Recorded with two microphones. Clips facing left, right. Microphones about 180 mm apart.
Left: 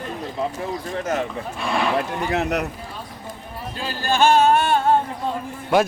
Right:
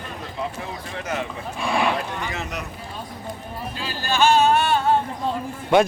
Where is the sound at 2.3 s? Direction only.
65° left (ahead or behind).